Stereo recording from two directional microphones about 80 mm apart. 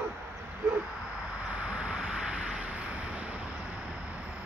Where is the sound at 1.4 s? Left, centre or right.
Centre.